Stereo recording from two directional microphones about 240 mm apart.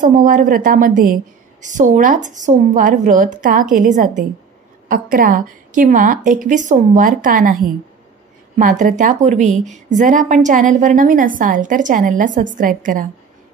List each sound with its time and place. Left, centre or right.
0.0 s a woman's voice: right